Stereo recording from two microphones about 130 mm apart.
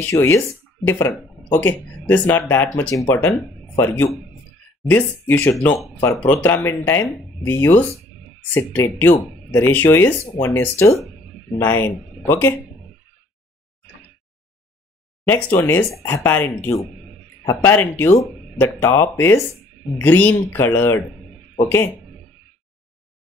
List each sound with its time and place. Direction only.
0.1 s a man's voice: 20° left (ahead or behind)
15.2 s speech: 15° left (ahead or behind)
17.5 s speech: 20° left (ahead or behind)